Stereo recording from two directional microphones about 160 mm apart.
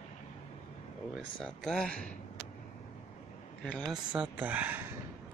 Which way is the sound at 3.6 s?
5° left (ahead or behind).